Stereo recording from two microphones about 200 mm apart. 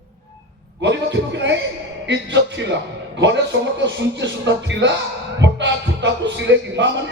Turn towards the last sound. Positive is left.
turn(degrees=-65)  # may be behind; listen again after turning